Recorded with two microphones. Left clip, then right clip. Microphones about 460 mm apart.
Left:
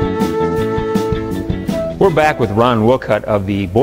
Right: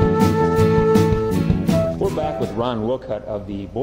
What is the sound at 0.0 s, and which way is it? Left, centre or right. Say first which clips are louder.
Music: left 1 dB; centre.